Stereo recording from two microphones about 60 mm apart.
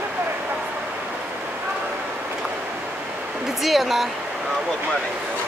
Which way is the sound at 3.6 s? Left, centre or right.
Centre.